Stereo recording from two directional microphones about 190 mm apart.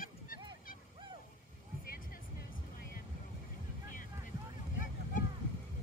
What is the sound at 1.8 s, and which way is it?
Music, 50° left (ahead or behind).